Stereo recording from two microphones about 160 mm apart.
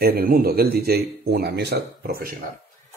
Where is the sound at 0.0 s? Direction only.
70° right (ahead or behind).